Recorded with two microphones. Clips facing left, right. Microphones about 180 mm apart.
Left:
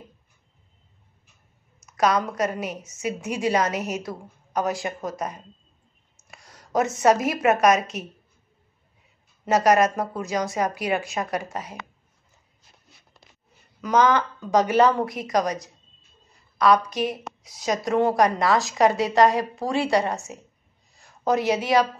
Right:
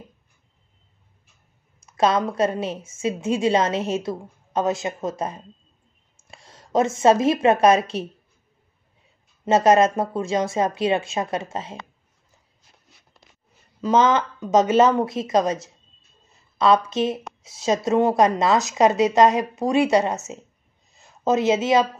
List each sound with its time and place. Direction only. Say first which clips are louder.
1.8 s a woman's voice: right 2 dB; 30° right (ahead or behind)
9.5 s a woman's voice: right 3 dB; 25° right (ahead or behind)
13.7 s a woman's voice: right 2 dB; 25° right (ahead or behind)
16.3 s a sound: right 1 dB; 25° right (ahead or behind)
17.4 s a woman's voice: right 4 dB; 25° right (ahead or behind)
20.9 s a sound: right 2 dB; 20° right (ahead or behind)